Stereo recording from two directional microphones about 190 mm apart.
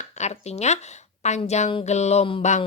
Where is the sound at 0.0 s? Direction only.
35° left (ahead or behind).